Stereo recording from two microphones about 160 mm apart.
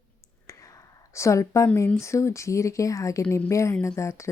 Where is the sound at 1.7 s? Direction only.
20° left (ahead or behind).